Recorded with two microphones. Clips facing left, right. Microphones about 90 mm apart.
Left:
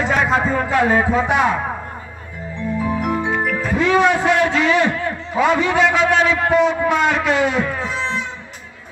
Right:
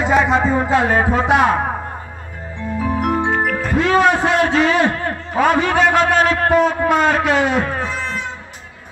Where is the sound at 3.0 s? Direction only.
40° right (ahead or behind).